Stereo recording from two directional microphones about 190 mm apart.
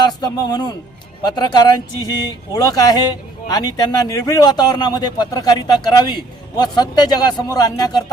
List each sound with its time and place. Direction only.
0.0 s a man's voice: 20° left (ahead or behind)